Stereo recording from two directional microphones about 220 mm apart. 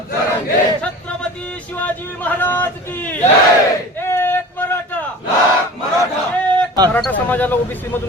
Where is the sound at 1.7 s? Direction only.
5° left (ahead or behind).